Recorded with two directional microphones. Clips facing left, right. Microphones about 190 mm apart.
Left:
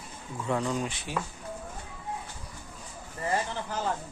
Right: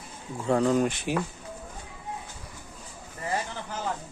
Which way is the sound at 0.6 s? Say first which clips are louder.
Right 8 dB; 50° right (ahead or behind).